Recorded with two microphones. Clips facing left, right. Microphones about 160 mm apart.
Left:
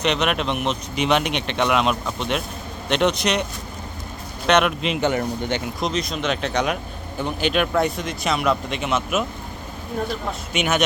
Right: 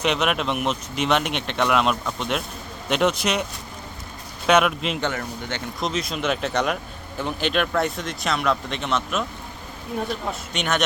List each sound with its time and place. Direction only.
0.0 s speech: 5° right (ahead or behind)
4.4 s speech: 5° right (ahead or behind)
5.0 s speech: 15° left (ahead or behind)
5.8 s speech: 5° right (ahead or behind)
10.5 s speech: 5° left (ahead or behind)